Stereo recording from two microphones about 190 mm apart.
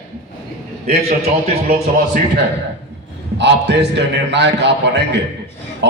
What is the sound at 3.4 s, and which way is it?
A man's voice, 65° right (ahead or behind).